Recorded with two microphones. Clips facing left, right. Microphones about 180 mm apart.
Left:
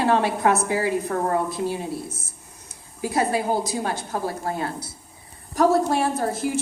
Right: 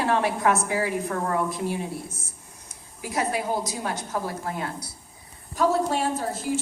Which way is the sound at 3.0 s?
30° left (ahead or behind).